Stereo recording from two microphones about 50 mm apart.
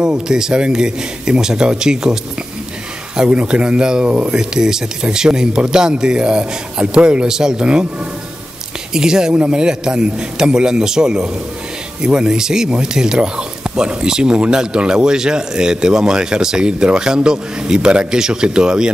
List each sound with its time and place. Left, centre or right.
0.0 s speech: centre
3.2 s speech: centre
4.4 s speech: centre
8.9 s speech: centre